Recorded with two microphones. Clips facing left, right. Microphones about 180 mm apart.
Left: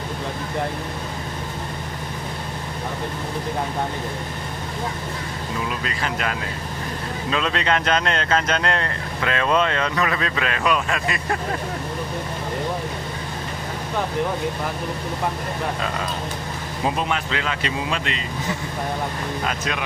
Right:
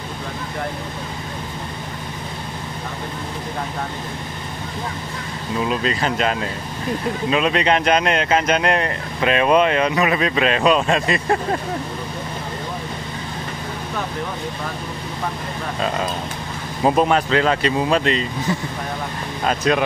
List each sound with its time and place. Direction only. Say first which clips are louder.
5.7 s speech: right 6 dB; 25° right (ahead or behind)
16.8 s speech: right 8 dB; 45° right (ahead or behind)
19.4 s speech: right 11 dB; 35° right (ahead or behind)